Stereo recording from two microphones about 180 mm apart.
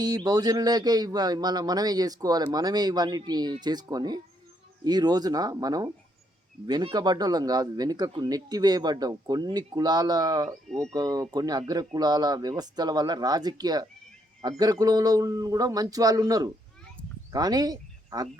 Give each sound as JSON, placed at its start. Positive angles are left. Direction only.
{"t": 0.0, "sound": "a man's voice", "side_deg": -20}
{"t": 10.7, "sound": "speech", "side_deg": 5}
{"t": 10.9, "sound": "a man's voice", "side_deg": -20}